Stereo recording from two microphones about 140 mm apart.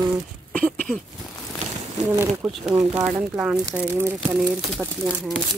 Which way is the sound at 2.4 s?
5° right (ahead or behind).